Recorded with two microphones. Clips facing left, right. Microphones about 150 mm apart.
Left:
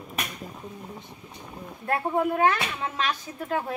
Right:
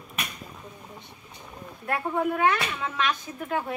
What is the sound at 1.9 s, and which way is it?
Speech, 30° left (ahead or behind).